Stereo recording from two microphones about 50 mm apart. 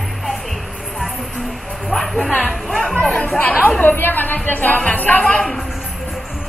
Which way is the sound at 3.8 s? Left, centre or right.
Left.